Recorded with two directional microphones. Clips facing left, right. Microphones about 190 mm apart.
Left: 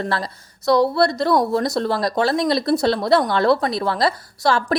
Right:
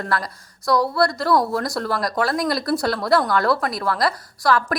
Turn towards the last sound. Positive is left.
turn(degrees=25)  # may be behind; listen again after turning